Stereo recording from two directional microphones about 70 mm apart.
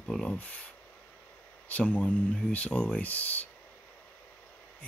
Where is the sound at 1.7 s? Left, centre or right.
Left.